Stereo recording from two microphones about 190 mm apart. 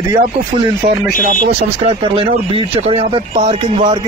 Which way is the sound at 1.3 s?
45° right (ahead or behind).